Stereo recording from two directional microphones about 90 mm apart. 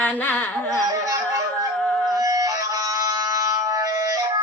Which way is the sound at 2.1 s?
40° right (ahead or behind).